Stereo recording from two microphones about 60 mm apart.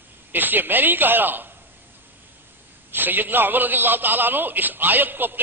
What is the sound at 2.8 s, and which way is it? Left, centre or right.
A man's voice, right.